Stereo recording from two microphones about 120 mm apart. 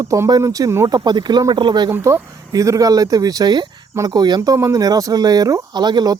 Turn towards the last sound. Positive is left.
turn(degrees=-35)  # may be behind; listen again after turning